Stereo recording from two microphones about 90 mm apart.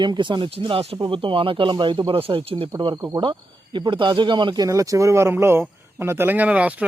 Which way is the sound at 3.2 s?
65° right (ahead or behind).